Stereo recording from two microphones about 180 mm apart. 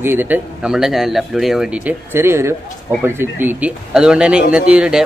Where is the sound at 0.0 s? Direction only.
10° right (ahead or behind).